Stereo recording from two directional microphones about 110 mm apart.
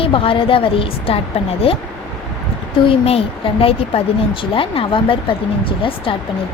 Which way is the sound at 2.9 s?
60° left (ahead or behind).